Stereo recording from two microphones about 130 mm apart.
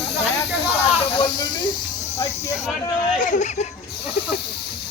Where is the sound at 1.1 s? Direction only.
45° left (ahead or behind).